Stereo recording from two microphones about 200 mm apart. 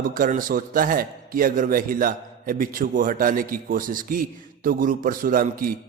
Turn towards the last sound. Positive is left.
turn(degrees=-45)  # may be behind; listen again after turning